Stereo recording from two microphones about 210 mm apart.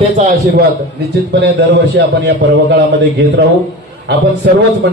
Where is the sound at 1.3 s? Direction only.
55° right (ahead or behind).